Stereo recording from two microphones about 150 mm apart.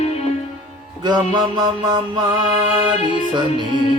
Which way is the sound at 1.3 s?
30° right (ahead or behind).